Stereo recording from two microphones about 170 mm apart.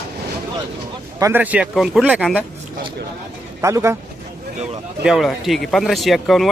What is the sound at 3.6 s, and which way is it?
Speech, 15° right (ahead or behind).